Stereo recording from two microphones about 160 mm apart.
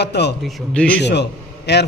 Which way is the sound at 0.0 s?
90° left.